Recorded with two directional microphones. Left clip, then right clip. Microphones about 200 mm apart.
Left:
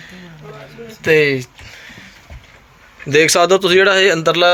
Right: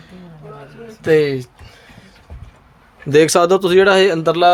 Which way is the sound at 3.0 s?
20° right (ahead or behind).